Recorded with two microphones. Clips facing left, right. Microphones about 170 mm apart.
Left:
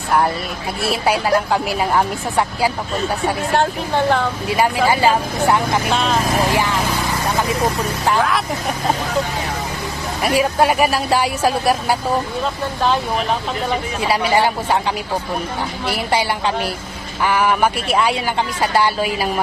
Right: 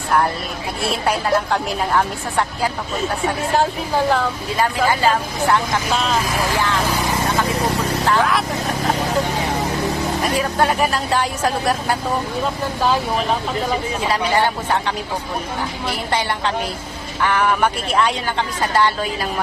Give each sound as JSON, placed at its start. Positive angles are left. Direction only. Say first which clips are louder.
{"t": 0.9, "sound": "speech", "louder": "left 2 dB", "side_deg": 5}
{"t": 3.5, "sound": "a woman's voice", "louder": "even", "side_deg": -5}
{"t": 4.5, "sound": "speech", "louder": "left 2 dB", "side_deg": 10}
{"t": 5.9, "sound": "a woman's voice", "louder": "even", "side_deg": 0}
{"t": 6.4, "sound": "speech", "louder": "left 2 dB", "side_deg": 15}
{"t": 8.2, "sound": "a woman's voice", "louder": "even", "side_deg": 0}
{"t": 10.3, "sound": "speech", "louder": "left 5 dB", "side_deg": 10}
{"t": 14.1, "sound": "speech", "louder": "left 3 dB", "side_deg": 10}
{"t": 17.2, "sound": "speech", "louder": "left 1 dB", "side_deg": 10}